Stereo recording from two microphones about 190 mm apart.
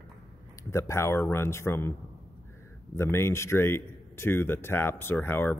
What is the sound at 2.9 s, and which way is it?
Speech, 15° left (ahead or behind).